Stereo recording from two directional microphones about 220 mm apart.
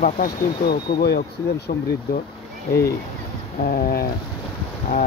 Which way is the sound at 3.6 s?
40° left (ahead or behind).